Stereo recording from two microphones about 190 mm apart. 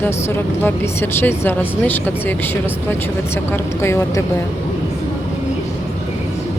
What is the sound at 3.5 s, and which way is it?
Speech, 15° left (ahead or behind).